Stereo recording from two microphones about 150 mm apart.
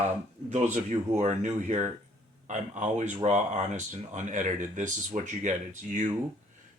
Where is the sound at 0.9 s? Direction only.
50° right (ahead or behind).